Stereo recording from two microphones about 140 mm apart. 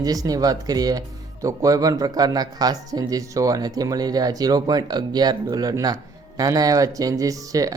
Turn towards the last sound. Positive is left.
turn(degrees=-25)  # may be behind; listen again after turning